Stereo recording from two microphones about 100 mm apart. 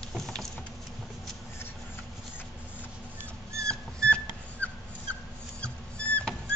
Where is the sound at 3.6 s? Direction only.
10° left (ahead or behind).